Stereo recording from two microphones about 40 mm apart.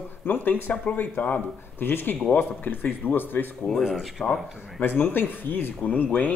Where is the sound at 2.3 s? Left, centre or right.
Left.